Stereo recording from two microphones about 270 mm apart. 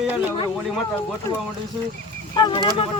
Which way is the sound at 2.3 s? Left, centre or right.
Centre.